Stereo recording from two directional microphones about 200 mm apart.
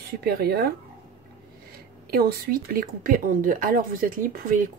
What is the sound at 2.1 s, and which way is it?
Speech, 45° right (ahead or behind).